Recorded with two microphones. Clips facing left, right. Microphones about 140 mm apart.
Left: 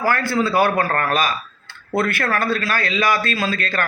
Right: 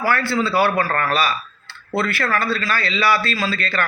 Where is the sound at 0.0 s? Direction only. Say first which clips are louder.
Left 1 dB; 45° left (ahead or behind).